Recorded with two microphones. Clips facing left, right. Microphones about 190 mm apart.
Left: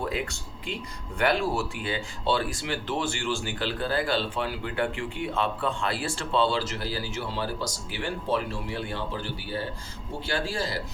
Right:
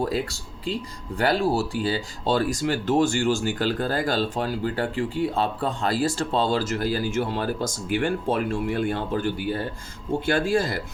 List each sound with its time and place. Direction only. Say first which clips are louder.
0.0 s speech: right 5 dB; 35° right (ahead or behind)